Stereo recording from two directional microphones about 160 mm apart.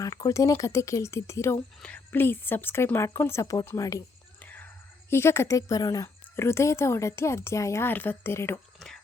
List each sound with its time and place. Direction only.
0.0 s speech: 20° left (ahead or behind)
4.4 s whispering: 10° left (ahead or behind)
5.1 s speech: 15° left (ahead or behind)